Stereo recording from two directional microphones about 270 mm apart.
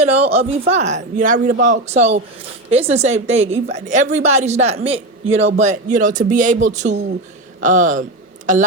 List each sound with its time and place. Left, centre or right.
0.0 s a woman's voice: right
1.5 s a man's voice: right
1.9 s a woman's voice: right